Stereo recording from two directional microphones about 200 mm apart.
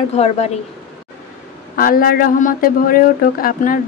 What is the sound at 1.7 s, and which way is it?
Speech, 45° left (ahead or behind).